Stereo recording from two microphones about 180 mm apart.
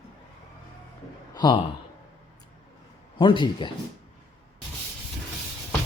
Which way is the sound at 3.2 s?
25° left (ahead or behind).